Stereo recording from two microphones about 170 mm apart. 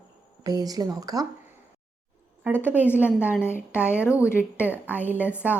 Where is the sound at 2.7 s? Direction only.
10° left (ahead or behind).